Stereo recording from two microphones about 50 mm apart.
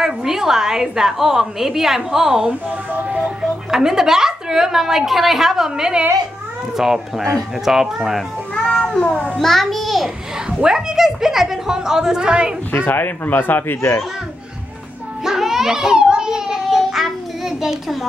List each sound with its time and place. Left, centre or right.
0.0 s a woman's voice: centre
8.5 s a child's voice: centre
9.4 s a child's voice: centre
12.7 s speech: left
13.7 s a child's voice: left
15.2 s a sound: centre